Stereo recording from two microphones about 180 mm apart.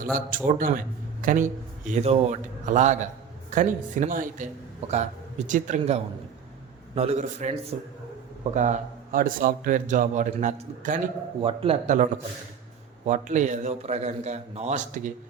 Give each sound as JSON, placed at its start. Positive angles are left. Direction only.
{"t": 0.0, "sound": "a man's voice", "side_deg": -50}
{"t": 11.4, "sound": "a man's voice", "side_deg": -30}
{"t": 13.1, "sound": "a man's voice", "side_deg": -40}